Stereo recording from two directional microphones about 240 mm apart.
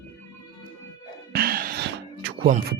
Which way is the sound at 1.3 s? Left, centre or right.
Right.